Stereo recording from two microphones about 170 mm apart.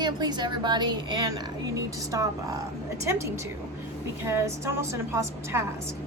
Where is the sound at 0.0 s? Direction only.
25° right (ahead or behind).